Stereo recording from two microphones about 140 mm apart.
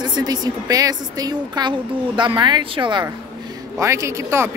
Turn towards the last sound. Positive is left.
turn(degrees=-20)  # may be behind; listen again after turning